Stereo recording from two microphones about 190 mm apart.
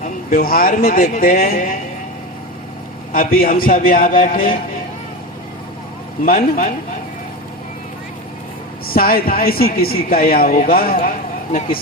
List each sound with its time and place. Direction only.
0.0 s speech: 50° left (ahead or behind)
3.1 s speech: 50° left (ahead or behind)
6.2 s speech: 45° left (ahead or behind)
8.9 s speech: 50° left (ahead or behind)